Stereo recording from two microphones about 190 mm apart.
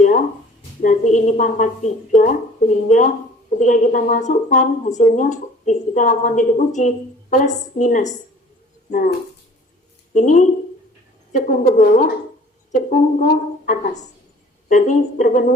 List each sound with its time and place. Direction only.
0.8 s a woman's voice: 45° left (ahead or behind)
10.2 s a woman's voice: 40° left (ahead or behind)